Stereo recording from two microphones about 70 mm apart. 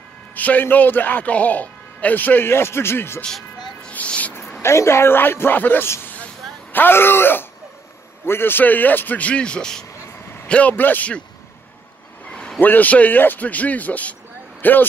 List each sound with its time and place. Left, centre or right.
0.3 s a man's voice: left
3.9 s a sound: left
4.6 s a man's voice: left; by 9.8 s centre
10.5 s a man's voice: left
12.3 s vehicle: centre
12.5 s a man's voice: left